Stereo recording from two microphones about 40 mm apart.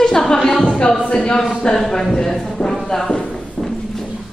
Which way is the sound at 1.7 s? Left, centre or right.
Centre.